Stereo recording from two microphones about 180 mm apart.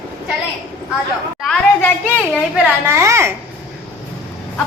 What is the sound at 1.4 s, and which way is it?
Speech, centre (ahead or behind).